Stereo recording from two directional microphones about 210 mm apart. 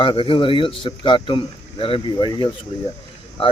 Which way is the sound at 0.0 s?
25° left (ahead or behind).